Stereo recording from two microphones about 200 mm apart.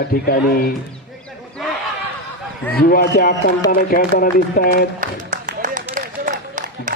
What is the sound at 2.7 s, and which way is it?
A man's voice, 50° left (ahead or behind).